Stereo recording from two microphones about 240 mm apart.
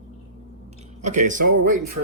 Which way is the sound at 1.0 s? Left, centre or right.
Right.